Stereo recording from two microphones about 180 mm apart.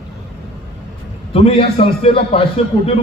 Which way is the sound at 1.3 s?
30° left (ahead or behind).